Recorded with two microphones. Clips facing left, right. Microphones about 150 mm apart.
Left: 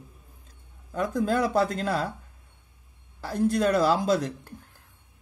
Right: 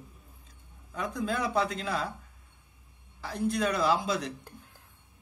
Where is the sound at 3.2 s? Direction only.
45° left (ahead or behind).